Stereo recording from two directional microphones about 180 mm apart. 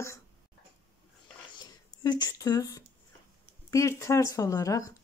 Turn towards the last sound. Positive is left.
turn(degrees=15)  # may be behind; listen again after turning